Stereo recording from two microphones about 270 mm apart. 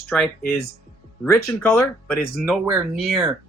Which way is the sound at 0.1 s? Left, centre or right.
Centre.